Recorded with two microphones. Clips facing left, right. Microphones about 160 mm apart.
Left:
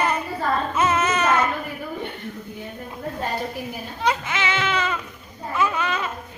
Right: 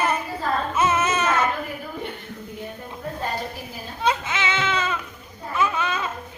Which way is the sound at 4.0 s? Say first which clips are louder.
Even; 20° right (ahead or behind).